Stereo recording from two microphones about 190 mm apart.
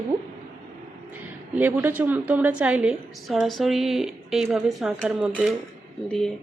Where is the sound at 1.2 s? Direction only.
10° right (ahead or behind).